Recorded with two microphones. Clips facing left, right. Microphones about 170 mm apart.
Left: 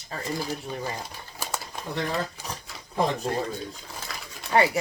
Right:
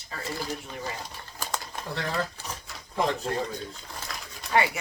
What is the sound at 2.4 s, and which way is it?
Speech, 15° left (ahead or behind).